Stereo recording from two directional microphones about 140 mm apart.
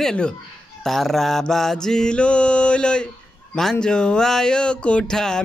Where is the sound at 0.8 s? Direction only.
Centre (ahead or behind).